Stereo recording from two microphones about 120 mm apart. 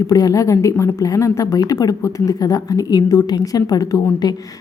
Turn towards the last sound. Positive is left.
turn(degrees=30)  # may be behind; listen again after turning